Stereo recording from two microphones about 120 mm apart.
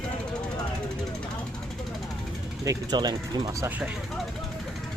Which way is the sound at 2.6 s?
30° right (ahead or behind).